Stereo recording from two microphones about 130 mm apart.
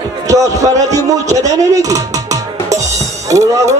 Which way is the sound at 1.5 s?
25° right (ahead or behind).